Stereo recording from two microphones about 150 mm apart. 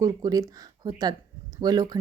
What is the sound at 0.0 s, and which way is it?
A woman's voice, 25° right (ahead or behind).